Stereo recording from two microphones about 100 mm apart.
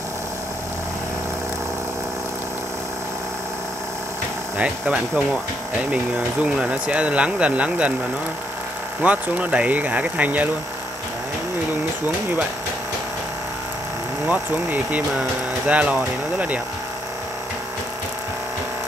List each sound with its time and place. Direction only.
4.6 s speech: 15° right (ahead or behind)
6.4 s speech: 10° right (ahead or behind)
9.0 s speech: 15° right (ahead or behind)
14.3 s speech: 15° right (ahead or behind)